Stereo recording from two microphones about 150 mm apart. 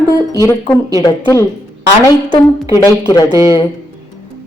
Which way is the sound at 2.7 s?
25° left (ahead or behind).